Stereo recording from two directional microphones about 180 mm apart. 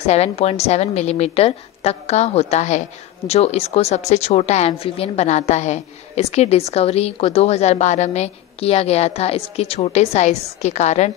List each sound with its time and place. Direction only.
0.0 s a woman's voice: 35° left (ahead or behind)